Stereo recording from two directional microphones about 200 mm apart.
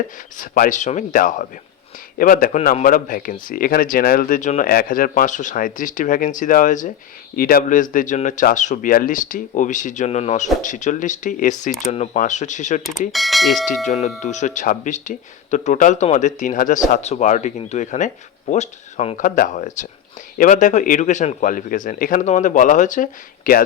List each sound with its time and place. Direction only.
0.3 s speech: 45° left (ahead or behind)
13.1 s speech: centre (ahead or behind)
13.8 s speech: 35° left (ahead or behind)